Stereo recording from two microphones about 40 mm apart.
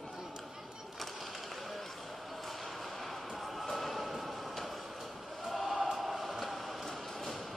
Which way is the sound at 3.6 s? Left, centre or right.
Centre.